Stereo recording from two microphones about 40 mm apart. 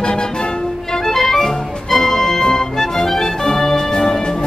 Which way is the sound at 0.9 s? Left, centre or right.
Centre.